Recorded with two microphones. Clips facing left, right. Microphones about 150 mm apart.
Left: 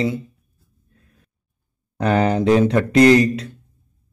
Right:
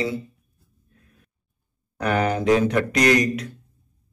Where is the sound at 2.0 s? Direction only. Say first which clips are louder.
Left 4 dB; 30° left (ahead or behind).